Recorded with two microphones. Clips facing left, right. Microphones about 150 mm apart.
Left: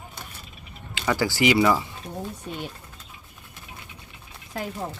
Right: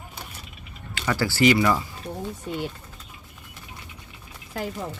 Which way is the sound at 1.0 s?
15° left (ahead or behind).